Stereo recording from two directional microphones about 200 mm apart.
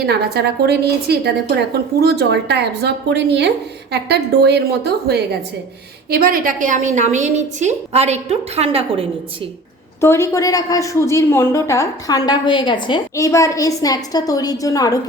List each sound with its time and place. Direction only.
0.0 s a woman's voice: 50° right (ahead or behind); by 9.0 s 30° right (ahead or behind)
10.0 s a woman's voice: 15° left (ahead or behind)